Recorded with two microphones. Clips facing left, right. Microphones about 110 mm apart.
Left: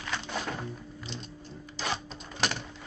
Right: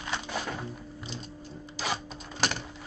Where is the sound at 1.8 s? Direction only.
5° right (ahead or behind).